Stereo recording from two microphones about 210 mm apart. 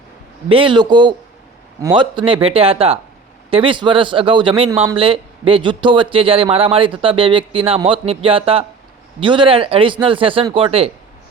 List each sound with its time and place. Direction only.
0.4 s speech: 25° right (ahead or behind)